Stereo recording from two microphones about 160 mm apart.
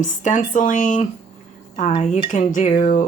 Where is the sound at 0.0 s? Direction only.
50° left (ahead or behind).